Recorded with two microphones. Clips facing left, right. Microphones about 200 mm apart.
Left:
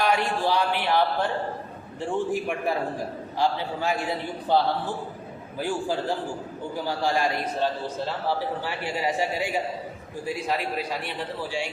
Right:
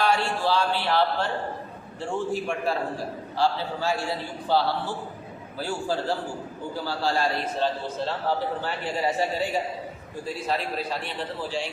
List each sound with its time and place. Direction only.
0.0 s a man's voice: 15° left (ahead or behind)
2.3 s a man's voice: 15° left (ahead or behind)
8.6 s a man's voice: 10° left (ahead or behind)